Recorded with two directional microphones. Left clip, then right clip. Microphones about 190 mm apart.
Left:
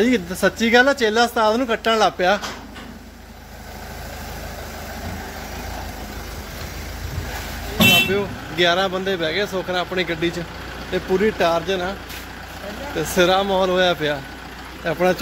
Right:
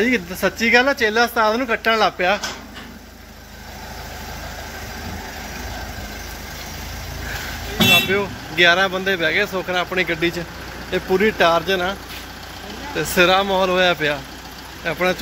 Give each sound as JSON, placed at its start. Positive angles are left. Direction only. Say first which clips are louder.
{"t": 0.0, "sound": "speech", "louder": "left 1 dB", "side_deg": 20}
{"t": 7.9, "sound": "speech", "louder": "right 1 dB", "side_deg": 0}
{"t": 12.9, "sound": "speech", "louder": "right 2 dB", "side_deg": 5}
{"t": 14.9, "sound": "speech", "louder": "left 1 dB", "side_deg": 20}